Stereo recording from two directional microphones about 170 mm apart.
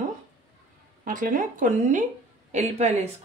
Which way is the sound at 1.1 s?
55° right (ahead or behind).